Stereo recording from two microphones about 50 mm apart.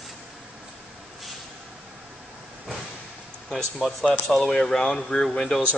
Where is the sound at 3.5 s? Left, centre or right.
Centre.